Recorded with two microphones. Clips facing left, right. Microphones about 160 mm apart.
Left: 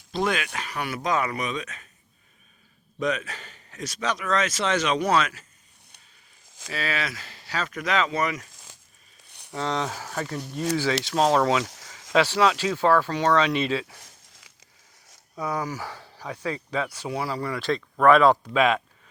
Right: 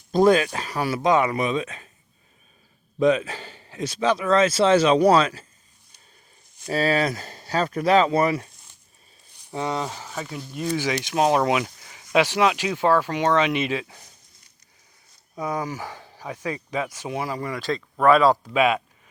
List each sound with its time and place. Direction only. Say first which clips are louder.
0.1 s a man's voice: right 9 dB; 40° right (ahead or behind)
3.0 s a man's voice: right 8 dB; 30° right (ahead or behind)
6.7 s a man's voice: right 8 dB; 40° right (ahead or behind)
8.5 s a sound: left 6 dB; 90° left
9.2 s a sound: left 3 dB; 70° left (ahead or behind)
9.5 s speech: right 1 dB; 15° right (ahead or behind)
11.0 s speech: right 2 dB; 15° right (ahead or behind)
11.6 s a sound: right 1 dB; 90° left
12.1 s speech: right 1 dB; 15° right (ahead or behind)
14.0 s a sound: left 1 dB; 90° left
15.4 s speech: right 1 dB; 20° right (ahead or behind)
18.0 s a man's voice: even; 35° right (ahead or behind)
18.5 s speech: right 1 dB; 15° right (ahead or behind)